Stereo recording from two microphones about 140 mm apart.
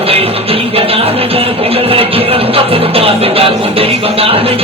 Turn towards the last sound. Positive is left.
turn(degrees=-45)  # may be behind; listen again after turning